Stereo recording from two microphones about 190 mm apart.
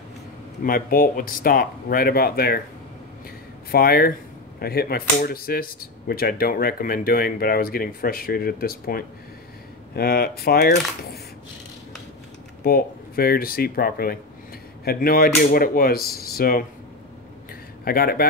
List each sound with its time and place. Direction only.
0.7 s speech: 50° left (ahead or behind)
3.7 s speech: 50° left (ahead or behind)
12.6 s speech: 50° left (ahead or behind)
17.8 s speech: 50° left (ahead or behind)